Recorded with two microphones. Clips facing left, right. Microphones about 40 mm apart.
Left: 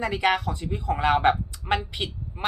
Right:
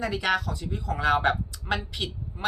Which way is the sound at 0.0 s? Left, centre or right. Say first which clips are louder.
Left 3 dB; left.